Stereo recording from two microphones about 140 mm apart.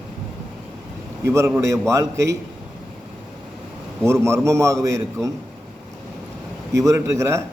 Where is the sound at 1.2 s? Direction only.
20° right (ahead or behind).